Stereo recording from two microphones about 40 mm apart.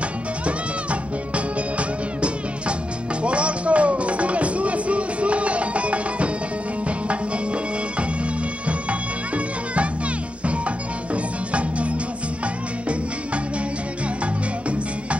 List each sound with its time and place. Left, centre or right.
1.3 s music: right